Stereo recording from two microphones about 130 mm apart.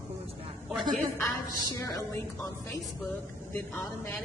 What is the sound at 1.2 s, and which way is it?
A woman's voice, 25° left (ahead or behind).